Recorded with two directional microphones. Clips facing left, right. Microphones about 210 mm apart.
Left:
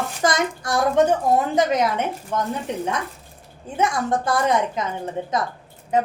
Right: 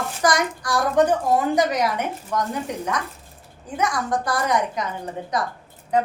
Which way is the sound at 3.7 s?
25° left (ahead or behind).